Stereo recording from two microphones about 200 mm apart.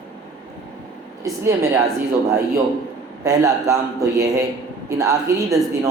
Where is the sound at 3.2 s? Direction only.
15° right (ahead or behind).